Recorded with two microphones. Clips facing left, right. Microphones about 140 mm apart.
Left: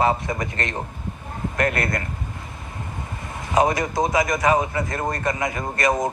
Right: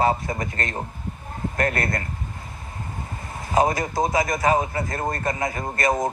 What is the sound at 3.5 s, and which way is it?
A man's voice, 25° right (ahead or behind).